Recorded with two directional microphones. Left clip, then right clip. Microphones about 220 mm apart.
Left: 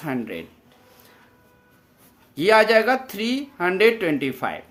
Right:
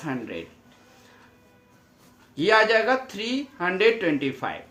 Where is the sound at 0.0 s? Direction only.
55° left (ahead or behind).